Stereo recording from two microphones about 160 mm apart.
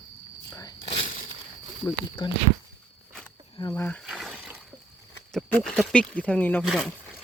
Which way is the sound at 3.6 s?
25° left (ahead or behind).